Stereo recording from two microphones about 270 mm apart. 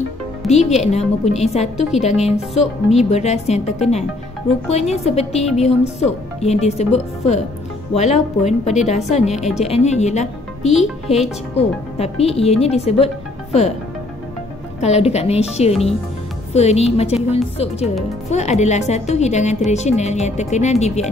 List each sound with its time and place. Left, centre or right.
0.5 s speech: left
14.8 s speech: left